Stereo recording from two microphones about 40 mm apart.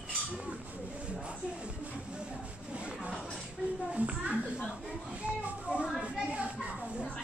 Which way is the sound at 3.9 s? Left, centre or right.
Right.